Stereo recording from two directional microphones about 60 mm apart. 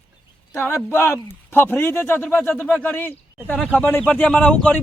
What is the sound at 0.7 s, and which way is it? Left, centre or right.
A man's voice, left.